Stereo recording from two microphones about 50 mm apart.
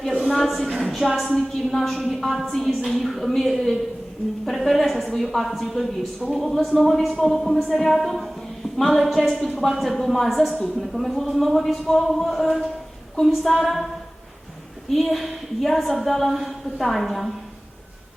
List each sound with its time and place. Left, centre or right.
0.3 s a sound: centre
1.3 s a woman's voice: centre
14.8 s a woman's voice: centre